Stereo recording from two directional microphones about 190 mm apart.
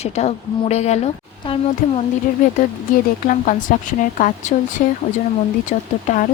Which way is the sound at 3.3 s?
45° left (ahead or behind).